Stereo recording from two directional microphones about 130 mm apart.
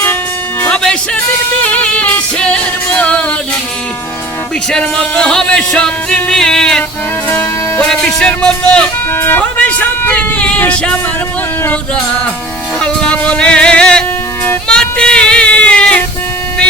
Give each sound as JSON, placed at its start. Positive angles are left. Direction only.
{"t": 0.6, "sound": "music", "side_deg": 5}
{"t": 4.7, "sound": "music", "side_deg": 10}
{"t": 7.3, "sound": "music", "side_deg": 20}
{"t": 7.9, "sound": "music", "side_deg": 5}
{"t": 12.8, "sound": "music", "side_deg": 5}
{"t": 14.7, "sound": "a sound", "side_deg": 5}